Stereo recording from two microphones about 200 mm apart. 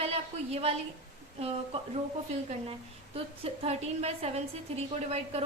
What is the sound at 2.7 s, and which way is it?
A woman's voice, 30° right (ahead or behind).